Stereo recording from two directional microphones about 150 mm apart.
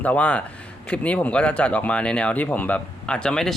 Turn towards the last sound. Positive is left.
turn(degrees=5)  # may be behind; listen again after turning